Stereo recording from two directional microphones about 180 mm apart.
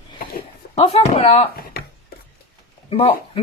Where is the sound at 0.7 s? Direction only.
35° left (ahead or behind).